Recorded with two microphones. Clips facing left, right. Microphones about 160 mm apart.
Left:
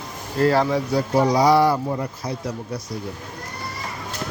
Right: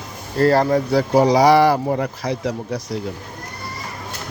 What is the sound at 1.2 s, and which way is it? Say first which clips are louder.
Speech: right 3 dB; 90° right.